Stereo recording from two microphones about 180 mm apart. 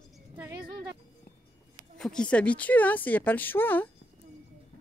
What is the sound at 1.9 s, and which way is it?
A woman's voice, 5° left (ahead or behind).